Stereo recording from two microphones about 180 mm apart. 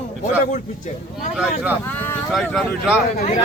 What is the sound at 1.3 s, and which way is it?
A man's voice, 5° right (ahead or behind).